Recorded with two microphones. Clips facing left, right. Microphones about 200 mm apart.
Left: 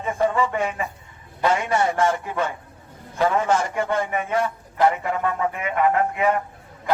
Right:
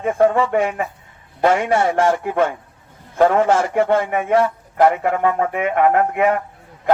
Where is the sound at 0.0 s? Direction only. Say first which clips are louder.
Right 6 dB; 60° right (ahead or behind).